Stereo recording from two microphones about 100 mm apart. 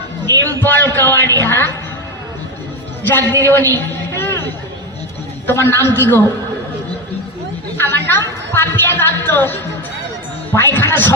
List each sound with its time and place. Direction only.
0.4 s a sound: 20° left (ahead or behind)
3.1 s a woman's voice: 20° left (ahead or behind)
5.5 s a woman's voice: 25° left (ahead or behind)
7.8 s a woman's voice: 20° left (ahead or behind)